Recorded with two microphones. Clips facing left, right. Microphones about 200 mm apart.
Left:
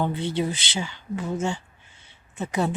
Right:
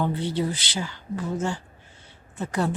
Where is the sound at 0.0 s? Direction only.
25° left (ahead or behind).